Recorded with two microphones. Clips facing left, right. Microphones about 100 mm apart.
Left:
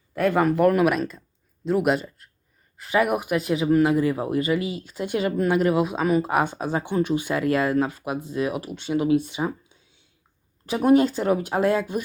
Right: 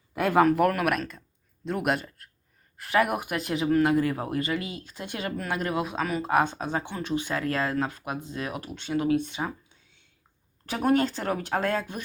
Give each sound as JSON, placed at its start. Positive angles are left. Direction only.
{"t": 0.1, "sound": "speech", "side_deg": -5}
{"t": 4.6, "sound": "speech", "side_deg": -45}
{"t": 4.9, "sound": "speech", "side_deg": 15}